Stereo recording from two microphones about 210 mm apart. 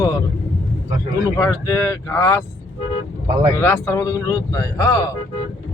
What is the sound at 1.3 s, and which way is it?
Speech, 10° left (ahead or behind).